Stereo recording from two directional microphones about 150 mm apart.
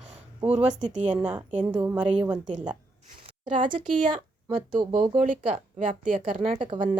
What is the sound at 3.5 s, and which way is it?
Speech, 35° right (ahead or behind).